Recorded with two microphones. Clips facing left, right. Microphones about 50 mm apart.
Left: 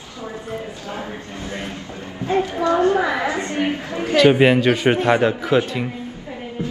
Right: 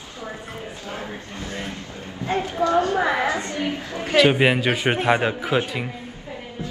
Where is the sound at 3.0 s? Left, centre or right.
Right.